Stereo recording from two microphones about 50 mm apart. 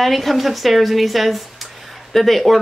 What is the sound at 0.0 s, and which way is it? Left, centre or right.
Speech, centre.